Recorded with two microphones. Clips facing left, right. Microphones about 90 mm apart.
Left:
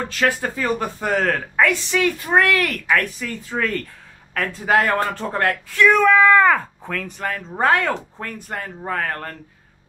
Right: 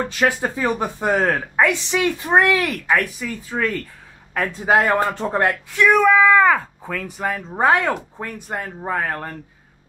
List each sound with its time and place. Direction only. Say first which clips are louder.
0.1 s speech: right 1 dB; 15° right (ahead or behind)
4.3 s speech: right 1 dB; 15° right (ahead or behind)